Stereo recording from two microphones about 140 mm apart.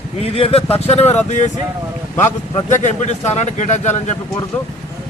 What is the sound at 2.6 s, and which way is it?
Speech, 55° left (ahead or behind).